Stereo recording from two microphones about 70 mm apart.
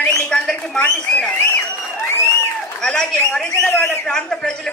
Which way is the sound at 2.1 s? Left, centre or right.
Left.